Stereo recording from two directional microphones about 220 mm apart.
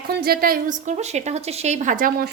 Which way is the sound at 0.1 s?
45° right (ahead or behind).